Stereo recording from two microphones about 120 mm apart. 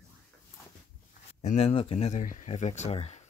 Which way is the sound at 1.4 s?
65° left (ahead or behind).